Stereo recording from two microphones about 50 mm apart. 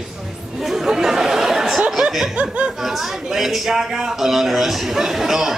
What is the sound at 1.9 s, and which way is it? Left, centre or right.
Laughter, centre.